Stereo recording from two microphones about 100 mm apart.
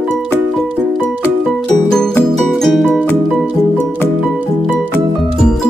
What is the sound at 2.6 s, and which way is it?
Music, 5° left (ahead or behind).